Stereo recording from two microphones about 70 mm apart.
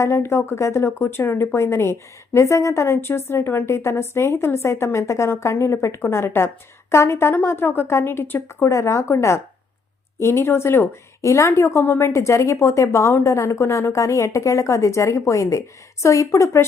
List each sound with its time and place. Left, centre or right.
0.2 s a woman's voice: left
8.7 s a woman's voice: left
11.2 s a woman's voice: left